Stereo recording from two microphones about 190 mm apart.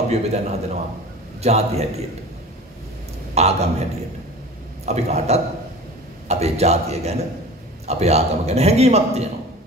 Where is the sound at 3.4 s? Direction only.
35° right (ahead or behind).